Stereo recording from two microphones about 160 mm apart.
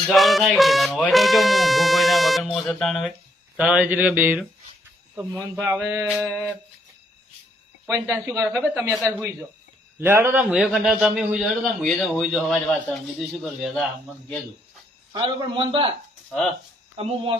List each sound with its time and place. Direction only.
0.1 s music: centre (ahead or behind)
3.6 s speech: 5° right (ahead or behind)
7.9 s a man's voice: 15° right (ahead or behind); by 13.8 s centre (ahead or behind)
15.1 s a man's voice: 30° right (ahead or behind)